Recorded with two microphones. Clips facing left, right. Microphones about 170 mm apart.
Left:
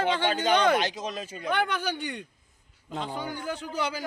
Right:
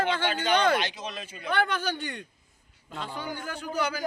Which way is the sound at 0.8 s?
40° left (ahead or behind).